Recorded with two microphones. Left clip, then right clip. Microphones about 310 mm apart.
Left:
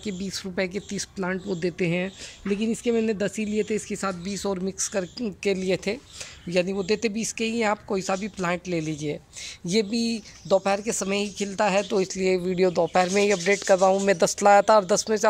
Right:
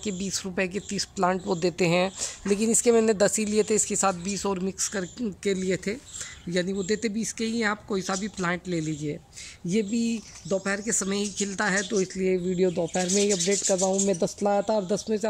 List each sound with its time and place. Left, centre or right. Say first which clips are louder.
0.0 s speech: right 1 dB; centre
12.7 s speech: left 5 dB; left
14.2 s speech: left 8 dB; left